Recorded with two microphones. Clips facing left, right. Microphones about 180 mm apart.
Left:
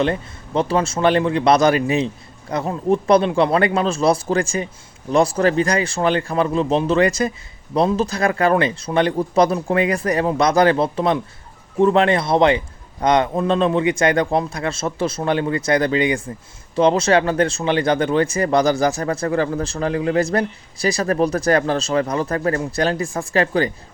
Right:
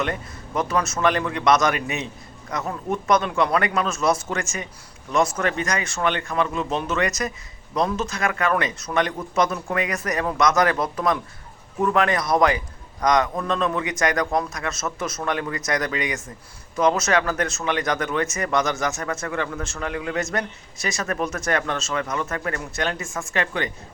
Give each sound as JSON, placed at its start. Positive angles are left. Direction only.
{"t": 0.0, "sound": "a man's voice", "side_deg": 30}